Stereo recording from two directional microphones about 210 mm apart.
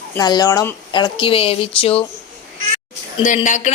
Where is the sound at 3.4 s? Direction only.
35° left (ahead or behind).